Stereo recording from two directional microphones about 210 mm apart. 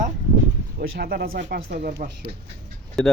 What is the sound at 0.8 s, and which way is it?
Speech, 45° right (ahead or behind).